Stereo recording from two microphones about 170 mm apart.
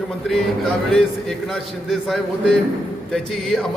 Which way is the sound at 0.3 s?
5° left (ahead or behind).